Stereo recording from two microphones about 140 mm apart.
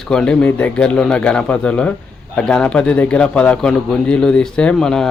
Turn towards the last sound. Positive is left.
turn(degrees=5)  # may be behind; listen again after turning